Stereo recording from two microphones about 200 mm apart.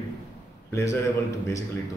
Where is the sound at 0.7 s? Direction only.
15° left (ahead or behind).